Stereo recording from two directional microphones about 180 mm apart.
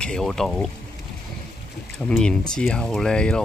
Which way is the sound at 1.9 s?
5° left (ahead or behind).